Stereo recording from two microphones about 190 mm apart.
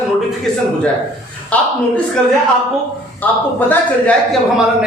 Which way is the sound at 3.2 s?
10° left (ahead or behind).